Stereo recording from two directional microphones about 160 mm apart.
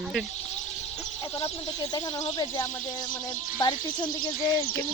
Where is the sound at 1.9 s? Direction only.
25° left (ahead or behind).